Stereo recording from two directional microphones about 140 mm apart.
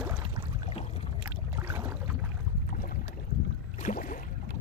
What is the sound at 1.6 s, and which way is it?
Boat, 10° right (ahead or behind).